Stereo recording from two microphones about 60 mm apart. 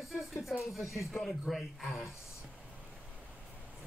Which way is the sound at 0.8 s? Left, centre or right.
Left.